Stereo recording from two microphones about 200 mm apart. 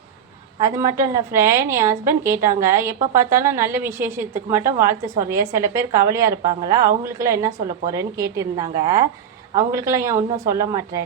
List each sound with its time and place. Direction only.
0.6 s a woman's voice: 15° right (ahead or behind)